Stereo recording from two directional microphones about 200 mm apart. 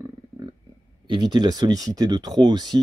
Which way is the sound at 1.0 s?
25° right (ahead or behind).